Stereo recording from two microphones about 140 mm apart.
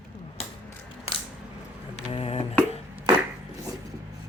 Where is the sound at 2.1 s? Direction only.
40° left (ahead or behind).